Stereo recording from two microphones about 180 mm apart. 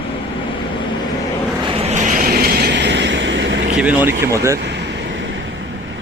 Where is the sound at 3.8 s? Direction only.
10° right (ahead or behind).